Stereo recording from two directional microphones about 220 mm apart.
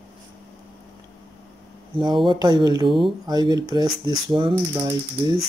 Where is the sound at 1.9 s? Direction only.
20° right (ahead or behind).